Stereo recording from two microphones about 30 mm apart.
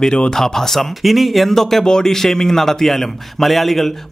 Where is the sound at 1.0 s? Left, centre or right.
Centre.